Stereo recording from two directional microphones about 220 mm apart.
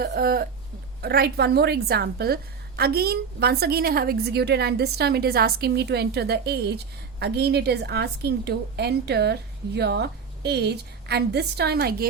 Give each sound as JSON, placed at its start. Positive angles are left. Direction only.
{"t": 0.0, "sound": "a woman's voice", "side_deg": -45}